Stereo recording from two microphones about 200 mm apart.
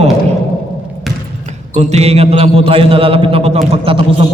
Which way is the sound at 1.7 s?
35° right (ahead or behind).